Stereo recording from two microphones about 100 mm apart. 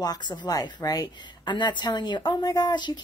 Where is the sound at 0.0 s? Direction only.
45° left (ahead or behind).